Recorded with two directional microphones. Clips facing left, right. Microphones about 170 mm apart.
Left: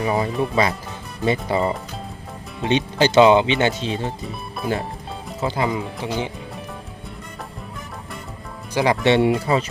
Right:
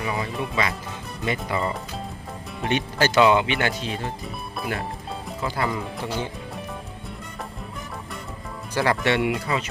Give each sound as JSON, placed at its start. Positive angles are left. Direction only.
{"t": 0.0, "sound": "speech", "side_deg": 35}
{"t": 8.7, "sound": "speech", "side_deg": 15}